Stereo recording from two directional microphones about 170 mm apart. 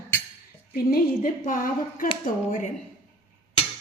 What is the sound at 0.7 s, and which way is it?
A woman's voice, 55° left (ahead or behind).